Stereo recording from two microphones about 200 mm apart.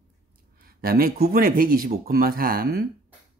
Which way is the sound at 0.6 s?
50° right (ahead or behind).